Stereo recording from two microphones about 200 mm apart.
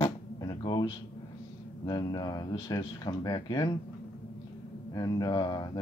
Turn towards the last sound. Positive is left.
turn(degrees=20)  # may be behind; listen again after turning